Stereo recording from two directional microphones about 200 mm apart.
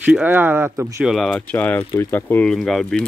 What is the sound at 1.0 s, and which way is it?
Speech, centre (ahead or behind).